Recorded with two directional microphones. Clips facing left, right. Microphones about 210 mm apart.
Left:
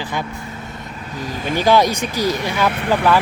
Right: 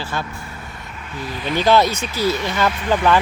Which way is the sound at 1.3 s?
45° left (ahead or behind).